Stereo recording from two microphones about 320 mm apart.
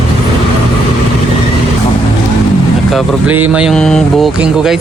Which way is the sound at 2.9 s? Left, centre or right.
Centre.